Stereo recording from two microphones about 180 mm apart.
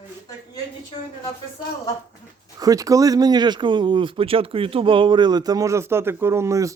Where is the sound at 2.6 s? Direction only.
20° right (ahead or behind).